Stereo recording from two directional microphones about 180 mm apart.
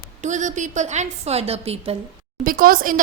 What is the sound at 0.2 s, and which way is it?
Speech, 40° right (ahead or behind).